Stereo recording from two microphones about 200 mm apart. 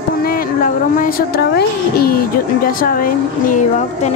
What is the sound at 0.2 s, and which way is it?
Speech, 45° left (ahead or behind).